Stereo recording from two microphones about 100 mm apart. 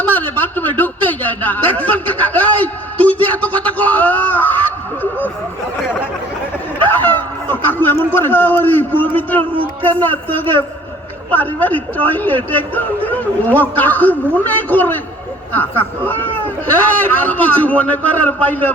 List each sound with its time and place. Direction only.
0.0 s a man's voice: 20° left (ahead or behind)
6.8 s a sound: 20° left (ahead or behind)
7.5 s a man's voice: 20° left (ahead or behind)